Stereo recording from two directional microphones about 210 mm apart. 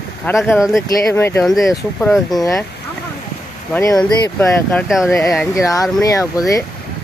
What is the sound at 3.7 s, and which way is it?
Speech, 15° left (ahead or behind).